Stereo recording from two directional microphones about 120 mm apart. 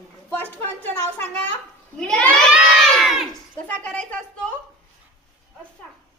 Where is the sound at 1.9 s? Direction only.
5° left (ahead or behind).